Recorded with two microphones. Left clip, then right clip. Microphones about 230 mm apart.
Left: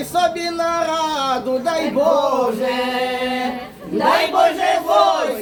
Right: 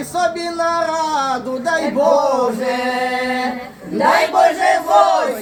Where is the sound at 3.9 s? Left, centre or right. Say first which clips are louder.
Right 2 dB; right.